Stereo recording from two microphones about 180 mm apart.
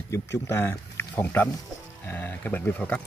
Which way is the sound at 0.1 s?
15° left (ahead or behind).